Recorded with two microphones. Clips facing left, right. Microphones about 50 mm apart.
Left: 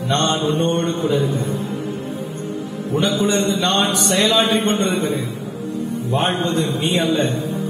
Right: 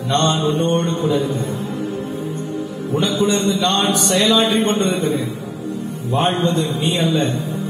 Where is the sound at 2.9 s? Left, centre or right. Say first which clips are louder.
Even; left.